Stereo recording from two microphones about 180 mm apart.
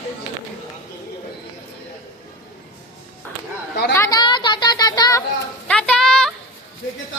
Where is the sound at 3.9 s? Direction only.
20° left (ahead or behind).